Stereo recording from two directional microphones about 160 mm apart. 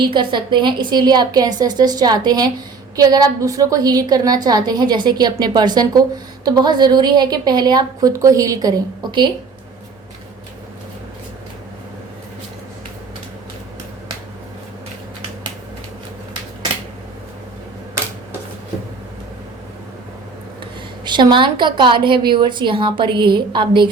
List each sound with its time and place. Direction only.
0.1 s a woman's voice: 30° right (ahead or behind)
21.0 s a woman's voice: 30° right (ahead or behind)